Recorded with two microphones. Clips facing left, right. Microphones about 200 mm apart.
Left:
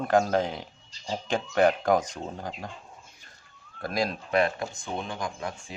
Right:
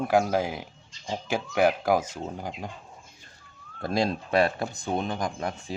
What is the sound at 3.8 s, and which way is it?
Speech, 25° right (ahead or behind).